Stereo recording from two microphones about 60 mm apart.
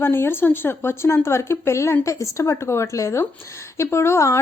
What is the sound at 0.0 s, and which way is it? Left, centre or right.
Speech, left.